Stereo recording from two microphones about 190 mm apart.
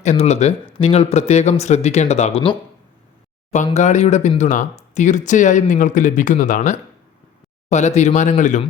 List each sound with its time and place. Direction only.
0.0 s speech: 35° left (ahead or behind)